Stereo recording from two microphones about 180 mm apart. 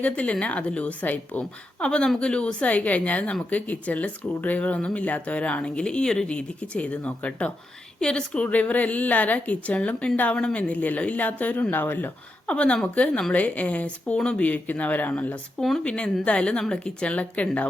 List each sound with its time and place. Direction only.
0.0 s a woman's voice: 5° left (ahead or behind)